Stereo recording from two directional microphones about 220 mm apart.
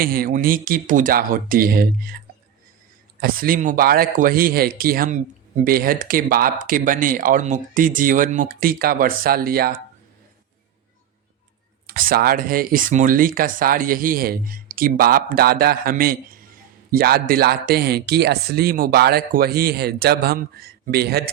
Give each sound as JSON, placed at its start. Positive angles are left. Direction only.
{"t": 0.0, "sound": "speech", "side_deg": -40}
{"t": 3.2, "sound": "speech", "side_deg": -40}
{"t": 11.9, "sound": "speech", "side_deg": -40}